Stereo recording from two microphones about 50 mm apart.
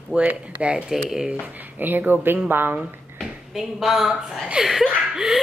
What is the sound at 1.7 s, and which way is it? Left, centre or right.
Speech, right.